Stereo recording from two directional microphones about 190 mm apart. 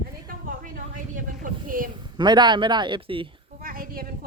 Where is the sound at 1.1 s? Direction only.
45° right (ahead or behind).